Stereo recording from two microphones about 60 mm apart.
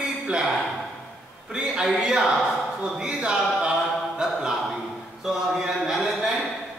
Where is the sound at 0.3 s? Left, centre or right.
Centre.